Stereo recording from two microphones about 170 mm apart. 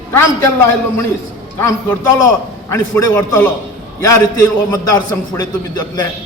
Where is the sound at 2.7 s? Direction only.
15° left (ahead or behind).